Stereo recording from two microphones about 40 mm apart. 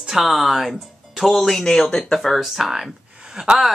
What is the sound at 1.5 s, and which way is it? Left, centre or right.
Speech, centre.